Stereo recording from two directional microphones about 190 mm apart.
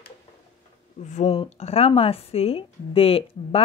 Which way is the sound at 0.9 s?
40° left (ahead or behind).